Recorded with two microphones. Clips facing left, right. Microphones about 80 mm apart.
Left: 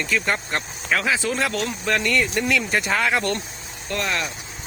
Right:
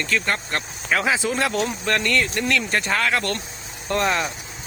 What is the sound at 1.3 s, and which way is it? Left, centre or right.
Speech, centre.